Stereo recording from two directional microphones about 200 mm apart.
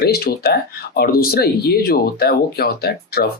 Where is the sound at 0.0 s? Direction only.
50° left (ahead or behind).